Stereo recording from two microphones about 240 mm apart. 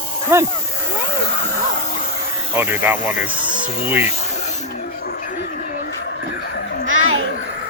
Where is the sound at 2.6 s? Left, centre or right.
Centre.